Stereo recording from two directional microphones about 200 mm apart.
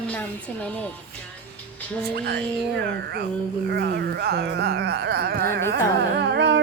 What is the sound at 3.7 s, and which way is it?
Speech, 55° right (ahead or behind).